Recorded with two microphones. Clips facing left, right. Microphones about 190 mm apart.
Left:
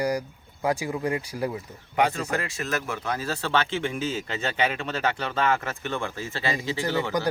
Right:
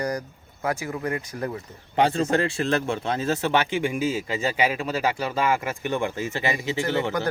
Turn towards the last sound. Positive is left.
turn(degrees=-20)  # may be behind; listen again after turning